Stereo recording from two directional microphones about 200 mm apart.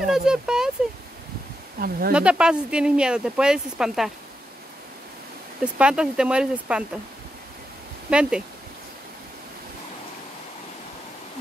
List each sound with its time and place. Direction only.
0.0 s speech: centre (ahead or behind)
1.8 s speech: 50° right (ahead or behind)
2.1 s speech: 5° right (ahead or behind)
5.6 s speech: 5° right (ahead or behind)
8.1 s speech: 5° right (ahead or behind)